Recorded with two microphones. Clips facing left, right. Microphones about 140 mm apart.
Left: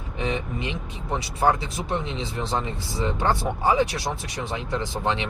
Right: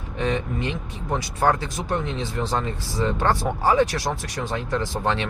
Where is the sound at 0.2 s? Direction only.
15° left (ahead or behind).